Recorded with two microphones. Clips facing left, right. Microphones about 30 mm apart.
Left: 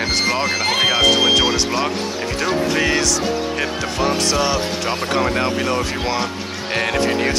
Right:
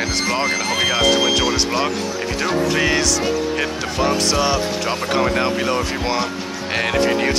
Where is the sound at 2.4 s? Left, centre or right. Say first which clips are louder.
Even; centre.